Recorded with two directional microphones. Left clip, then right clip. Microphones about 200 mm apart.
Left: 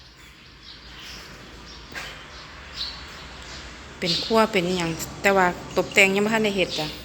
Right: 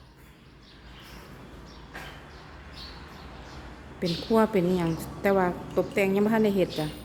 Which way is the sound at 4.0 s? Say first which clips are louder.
Left 4 dB; 10° right (ahead or behind).